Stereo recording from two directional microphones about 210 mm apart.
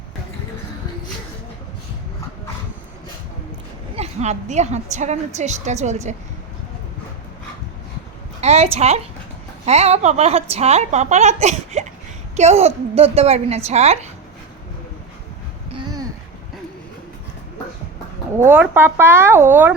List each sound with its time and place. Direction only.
3.9 s a woman's voice: 30° right (ahead or behind)
8.4 s a woman's voice: 30° right (ahead or behind)
18.3 s speech: 10° right (ahead or behind)